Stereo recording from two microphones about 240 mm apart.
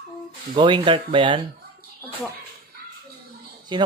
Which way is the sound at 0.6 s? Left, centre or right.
Centre.